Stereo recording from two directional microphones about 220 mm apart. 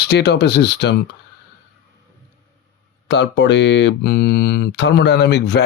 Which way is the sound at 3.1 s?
55° left (ahead or behind).